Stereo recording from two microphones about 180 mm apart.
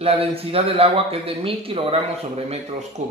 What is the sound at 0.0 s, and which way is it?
Speech, 35° right (ahead or behind).